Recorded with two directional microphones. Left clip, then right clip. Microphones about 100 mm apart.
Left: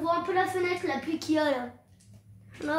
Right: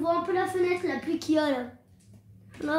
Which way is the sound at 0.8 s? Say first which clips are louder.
Right 1 dB; 35° right (ahead or behind).